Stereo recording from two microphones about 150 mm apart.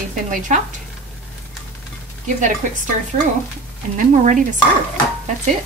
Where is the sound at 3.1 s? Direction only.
50° right (ahead or behind).